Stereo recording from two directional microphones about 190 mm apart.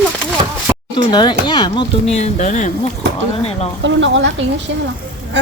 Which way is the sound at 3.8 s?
75° right (ahead or behind).